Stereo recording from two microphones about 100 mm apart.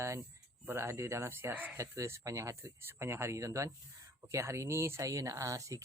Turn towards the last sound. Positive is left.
turn(degrees=-30)  # may be behind; listen again after turning